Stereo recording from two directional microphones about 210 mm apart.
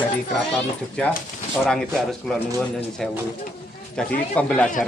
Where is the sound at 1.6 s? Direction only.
5° left (ahead or behind).